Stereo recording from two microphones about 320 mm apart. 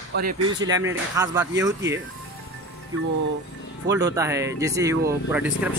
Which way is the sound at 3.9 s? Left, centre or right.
Centre.